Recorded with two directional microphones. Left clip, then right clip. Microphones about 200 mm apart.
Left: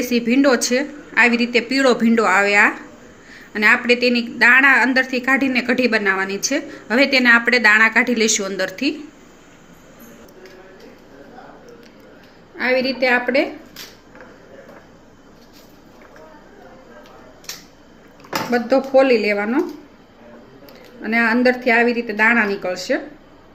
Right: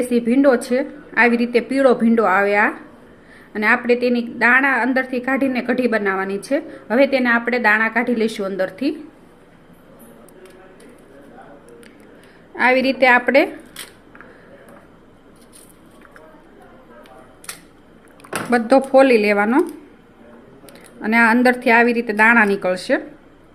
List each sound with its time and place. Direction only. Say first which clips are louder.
0.1 s a woman's voice: even; 20° right (ahead or behind)
12.5 s a woman's voice: right 3 dB; 50° right (ahead or behind)
18.5 s a woman's voice: right 2 dB; 40° right (ahead or behind)
21.0 s a woman's voice: right 2 dB; 40° right (ahead or behind)